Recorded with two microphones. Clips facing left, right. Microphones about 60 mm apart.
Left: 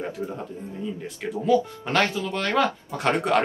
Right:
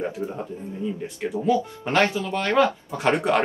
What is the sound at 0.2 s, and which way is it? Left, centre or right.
Speech, centre.